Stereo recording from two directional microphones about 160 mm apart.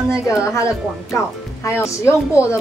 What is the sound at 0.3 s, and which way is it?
Speech, 20° left (ahead or behind).